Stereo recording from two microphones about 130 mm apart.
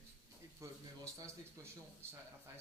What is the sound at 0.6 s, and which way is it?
Speech, 25° right (ahead or behind).